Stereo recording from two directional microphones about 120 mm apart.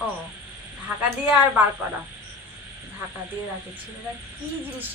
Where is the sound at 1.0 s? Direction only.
10° right (ahead or behind).